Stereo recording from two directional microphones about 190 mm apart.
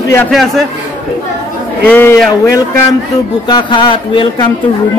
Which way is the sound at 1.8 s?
10° left (ahead or behind).